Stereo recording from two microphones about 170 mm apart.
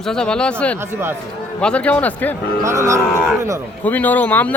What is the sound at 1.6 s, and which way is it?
Speech, 5° left (ahead or behind).